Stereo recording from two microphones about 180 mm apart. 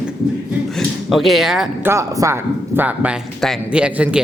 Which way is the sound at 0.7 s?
Centre (ahead or behind).